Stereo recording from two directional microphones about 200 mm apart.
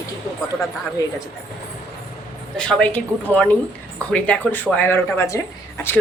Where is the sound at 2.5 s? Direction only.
5° left (ahead or behind).